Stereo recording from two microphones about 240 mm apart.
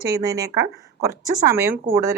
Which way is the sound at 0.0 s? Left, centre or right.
Centre.